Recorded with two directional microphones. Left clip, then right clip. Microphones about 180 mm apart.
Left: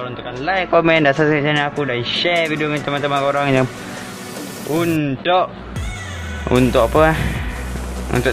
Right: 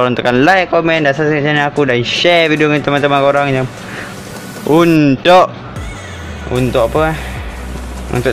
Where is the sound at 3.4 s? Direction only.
Centre (ahead or behind).